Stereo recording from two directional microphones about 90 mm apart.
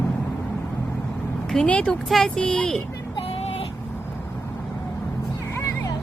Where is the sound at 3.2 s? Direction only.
90° left.